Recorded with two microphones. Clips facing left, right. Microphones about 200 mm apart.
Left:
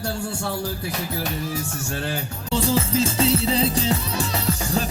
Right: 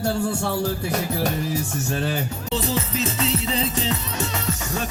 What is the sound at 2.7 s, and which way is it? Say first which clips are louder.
Music: left 4 dB; 30° left (ahead or behind).